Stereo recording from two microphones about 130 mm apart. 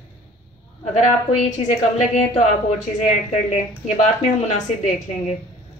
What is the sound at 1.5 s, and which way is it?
Speech, 65° left (ahead or behind).